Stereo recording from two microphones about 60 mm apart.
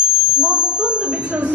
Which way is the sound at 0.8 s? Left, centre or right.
Centre.